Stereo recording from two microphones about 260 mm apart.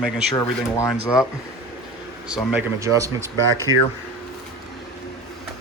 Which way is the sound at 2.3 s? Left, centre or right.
Centre.